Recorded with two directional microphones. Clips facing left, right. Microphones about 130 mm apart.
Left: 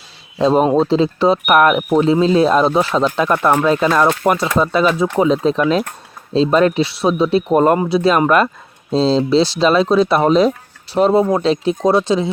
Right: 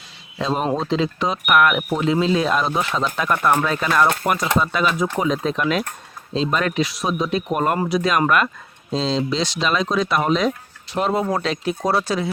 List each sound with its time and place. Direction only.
0.3 s speech: 35° left (ahead or behind)